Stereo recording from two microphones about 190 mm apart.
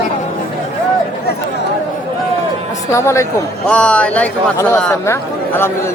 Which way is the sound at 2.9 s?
15° left (ahead or behind).